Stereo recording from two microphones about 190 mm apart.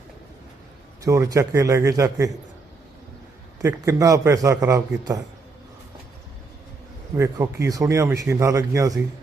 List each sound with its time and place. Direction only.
1.0 s speech: 15° right (ahead or behind)
3.6 s speech: 15° right (ahead or behind)
7.2 s speech: 15° right (ahead or behind)